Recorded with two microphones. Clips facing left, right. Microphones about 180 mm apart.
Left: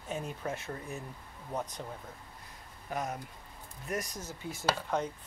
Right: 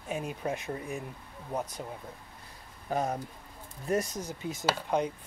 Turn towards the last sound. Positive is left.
turn(degrees=-15)  # may be behind; listen again after turning